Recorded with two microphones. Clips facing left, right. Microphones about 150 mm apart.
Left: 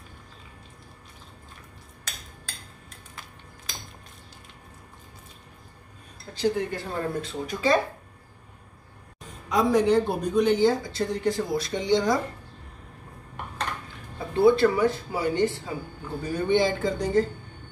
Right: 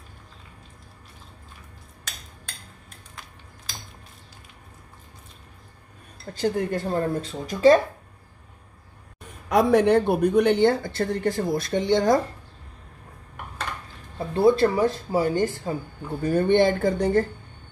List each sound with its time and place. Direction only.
6.3 s speech: 45° right (ahead or behind)
9.5 s speech: 60° right (ahead or behind)
14.3 s speech: 35° right (ahead or behind); by 17.3 s 55° right (ahead or behind)